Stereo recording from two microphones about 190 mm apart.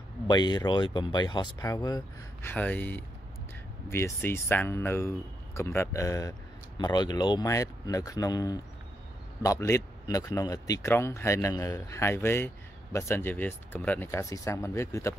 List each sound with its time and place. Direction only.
0.3 s speech: 25° left (ahead or behind)
2.5 s speech: 10° left (ahead or behind)